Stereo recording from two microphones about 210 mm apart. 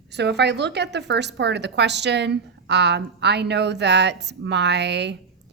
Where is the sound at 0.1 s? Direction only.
55° right (ahead or behind).